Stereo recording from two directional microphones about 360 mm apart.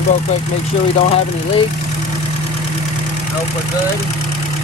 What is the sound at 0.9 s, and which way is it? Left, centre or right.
Speech, centre.